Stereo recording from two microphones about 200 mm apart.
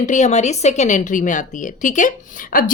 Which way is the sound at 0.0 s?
35° left (ahead or behind).